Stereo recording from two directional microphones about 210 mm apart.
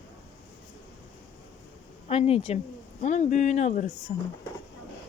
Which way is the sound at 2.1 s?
30° left (ahead or behind).